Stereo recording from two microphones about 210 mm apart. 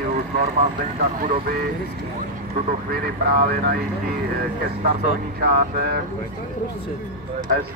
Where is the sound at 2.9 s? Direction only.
45° right (ahead or behind).